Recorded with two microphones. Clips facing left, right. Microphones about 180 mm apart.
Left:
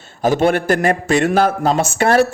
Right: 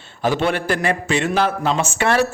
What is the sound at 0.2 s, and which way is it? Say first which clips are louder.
A man's voice: left 5 dB; 45° left (ahead or behind).